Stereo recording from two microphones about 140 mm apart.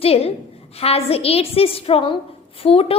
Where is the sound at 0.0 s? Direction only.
45° left (ahead or behind).